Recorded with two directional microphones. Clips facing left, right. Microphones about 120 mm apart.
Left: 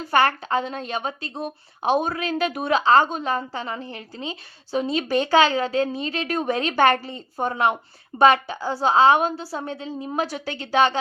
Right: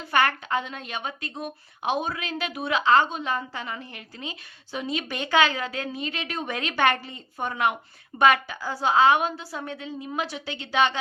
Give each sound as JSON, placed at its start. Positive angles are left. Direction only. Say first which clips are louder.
{"t": 0.0, "sound": "a woman's voice", "louder": "left 4 dB", "side_deg": 35}